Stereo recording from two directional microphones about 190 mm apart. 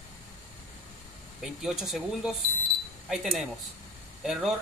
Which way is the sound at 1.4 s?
Centre (ahead or behind).